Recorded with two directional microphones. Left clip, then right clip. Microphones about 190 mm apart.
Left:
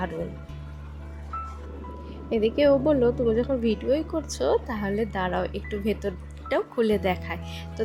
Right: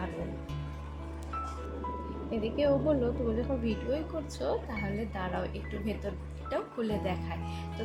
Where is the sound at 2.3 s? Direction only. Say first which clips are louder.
Left 9 dB; 45° left (ahead or behind).